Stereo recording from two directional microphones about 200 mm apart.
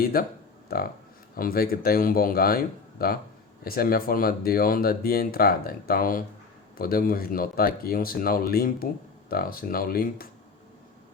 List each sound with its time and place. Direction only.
0.0 s speech: 50° left (ahead or behind)